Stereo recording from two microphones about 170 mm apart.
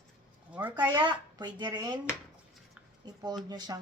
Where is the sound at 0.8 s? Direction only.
25° right (ahead or behind).